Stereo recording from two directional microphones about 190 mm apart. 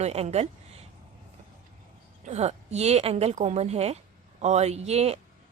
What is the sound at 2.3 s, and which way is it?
A woman's voice, 35° right (ahead or behind).